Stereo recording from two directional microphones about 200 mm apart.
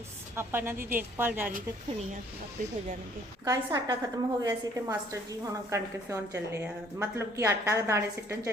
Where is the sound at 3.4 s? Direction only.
20° right (ahead or behind).